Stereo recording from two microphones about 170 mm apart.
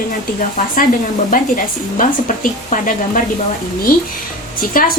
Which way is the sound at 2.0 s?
50° left (ahead or behind).